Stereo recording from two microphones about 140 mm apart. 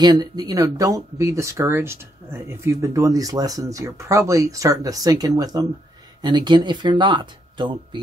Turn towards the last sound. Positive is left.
turn(degrees=-35)  # may be behind; listen again after turning